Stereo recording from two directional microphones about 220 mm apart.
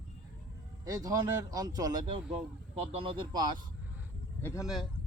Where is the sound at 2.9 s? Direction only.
20° right (ahead or behind).